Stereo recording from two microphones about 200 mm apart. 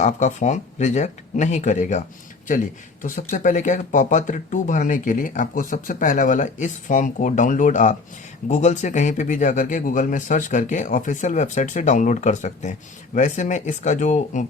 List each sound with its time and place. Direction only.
0.0 s speech: 35° left (ahead or behind)